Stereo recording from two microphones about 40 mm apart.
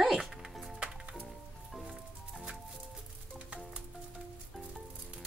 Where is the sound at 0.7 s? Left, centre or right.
Right.